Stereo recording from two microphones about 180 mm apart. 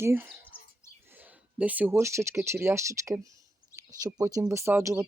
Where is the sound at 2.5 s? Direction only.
15° right (ahead or behind).